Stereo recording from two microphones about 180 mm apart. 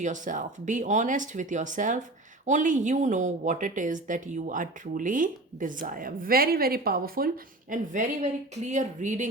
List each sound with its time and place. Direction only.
0.0 s a woman's voice: 45° right (ahead or behind)
7.7 s a woman's voice: 45° right (ahead or behind)